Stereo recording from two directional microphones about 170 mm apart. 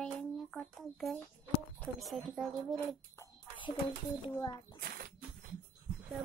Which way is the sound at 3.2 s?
30° left (ahead or behind).